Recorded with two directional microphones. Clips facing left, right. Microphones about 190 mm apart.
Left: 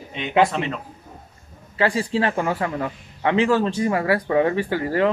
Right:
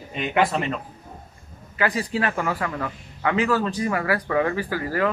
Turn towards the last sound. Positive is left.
turn(degrees=25)  # may be behind; listen again after turning